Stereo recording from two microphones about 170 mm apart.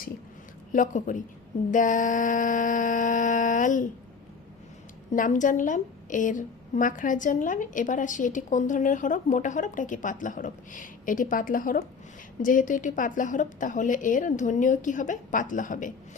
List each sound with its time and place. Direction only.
0.7 s a woman's voice: 50° left (ahead or behind)
5.1 s a woman's voice: 50° left (ahead or behind)